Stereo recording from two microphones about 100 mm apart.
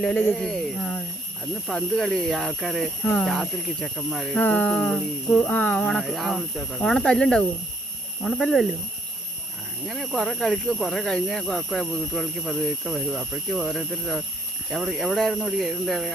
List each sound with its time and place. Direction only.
0.2 s speech: centre (ahead or behind)
4.4 s speech: 15° left (ahead or behind)
5.9 s speech: centre (ahead or behind)
9.8 s speech: centre (ahead or behind)